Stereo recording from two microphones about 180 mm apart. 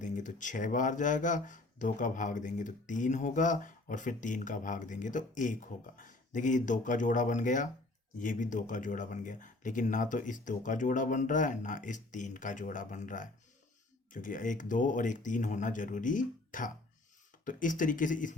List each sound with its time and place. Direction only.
0.0 s speech: 45° left (ahead or behind)